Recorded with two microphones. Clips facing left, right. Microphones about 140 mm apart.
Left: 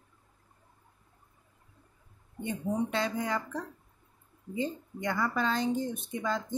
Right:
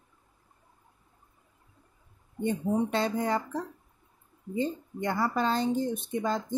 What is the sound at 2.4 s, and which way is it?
Speech, 35° right (ahead or behind).